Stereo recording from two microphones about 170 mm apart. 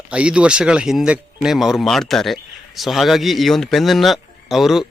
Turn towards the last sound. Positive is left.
turn(degrees=0)  # may be behind; listen again after turning